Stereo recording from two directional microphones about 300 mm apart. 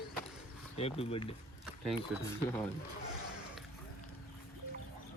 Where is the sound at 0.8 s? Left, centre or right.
Centre.